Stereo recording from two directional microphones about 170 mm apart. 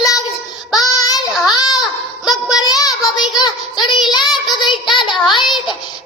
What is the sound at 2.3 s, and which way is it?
Child singing, centre (ahead or behind).